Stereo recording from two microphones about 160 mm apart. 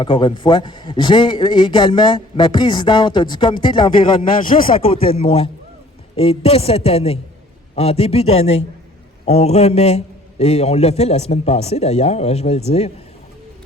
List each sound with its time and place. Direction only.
0.0 s a man's voice: 30° left (ahead or behind)
4.4 s speech: 60° left (ahead or behind)
4.8 s a man's voice: 35° left (ahead or behind)